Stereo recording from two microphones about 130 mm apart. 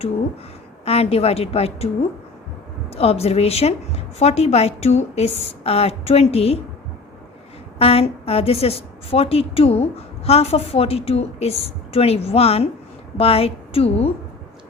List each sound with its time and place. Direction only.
0.9 s a woman's voice: 50° left (ahead or behind)
7.8 s a woman's voice: 50° left (ahead or behind)